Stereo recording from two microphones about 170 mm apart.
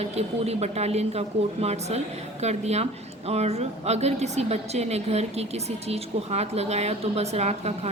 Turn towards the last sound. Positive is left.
turn(degrees=-40)  # may be behind; listen again after turning